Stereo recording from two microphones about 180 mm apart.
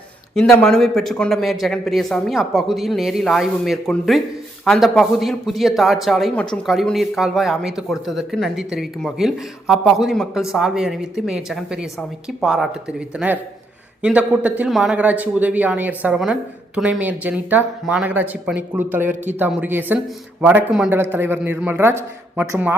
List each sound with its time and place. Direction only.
0.6 s a man's voice: 5° left (ahead or behind)